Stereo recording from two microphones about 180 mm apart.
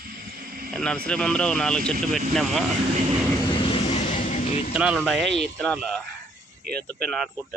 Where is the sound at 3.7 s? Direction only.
30° left (ahead or behind).